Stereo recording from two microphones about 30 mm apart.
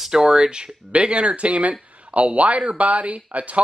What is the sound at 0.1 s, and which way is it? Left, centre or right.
Speech, right.